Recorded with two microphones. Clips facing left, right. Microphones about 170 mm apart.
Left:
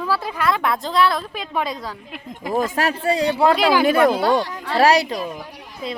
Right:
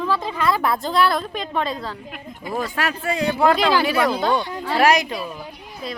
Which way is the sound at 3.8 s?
50° left (ahead or behind).